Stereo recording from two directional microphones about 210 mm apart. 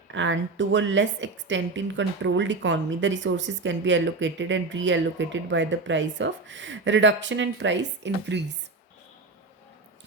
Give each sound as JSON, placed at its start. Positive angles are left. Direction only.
{"t": 0.1, "sound": "a woman's voice", "side_deg": -60}